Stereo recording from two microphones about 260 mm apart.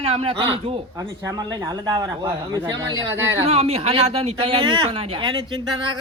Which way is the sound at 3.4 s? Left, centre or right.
Right.